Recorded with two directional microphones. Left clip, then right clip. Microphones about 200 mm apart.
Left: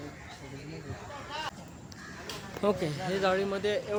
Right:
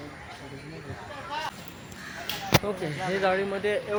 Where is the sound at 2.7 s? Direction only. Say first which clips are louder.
Left 3 dB; 55° left (ahead or behind).